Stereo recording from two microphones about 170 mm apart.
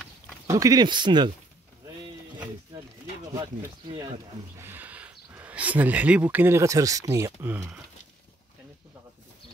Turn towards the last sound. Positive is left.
turn(degrees=-10)  # may be behind; listen again after turning